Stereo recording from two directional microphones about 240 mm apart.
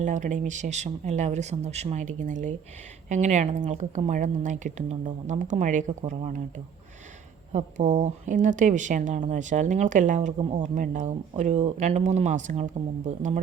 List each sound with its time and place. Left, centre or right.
0.0 s speech: right
7.5 s speech: right